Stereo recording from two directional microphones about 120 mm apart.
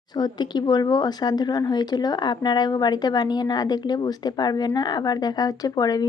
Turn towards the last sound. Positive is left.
turn(degrees=35)  # may be behind; listen again after turning